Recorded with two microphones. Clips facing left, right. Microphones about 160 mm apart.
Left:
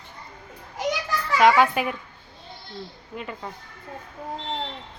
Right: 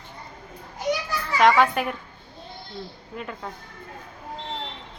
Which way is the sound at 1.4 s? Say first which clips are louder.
Even; centre (ahead or behind).